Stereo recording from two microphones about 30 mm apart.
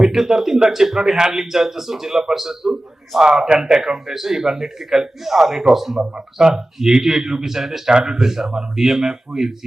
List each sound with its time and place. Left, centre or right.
0.1 s a man's voice: centre
7.9 s a man's voice: right